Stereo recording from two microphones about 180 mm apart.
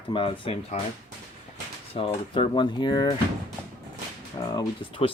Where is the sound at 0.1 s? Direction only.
30° left (ahead or behind).